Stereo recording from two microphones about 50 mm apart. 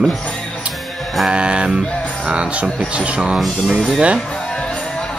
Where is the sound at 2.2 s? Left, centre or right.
Right.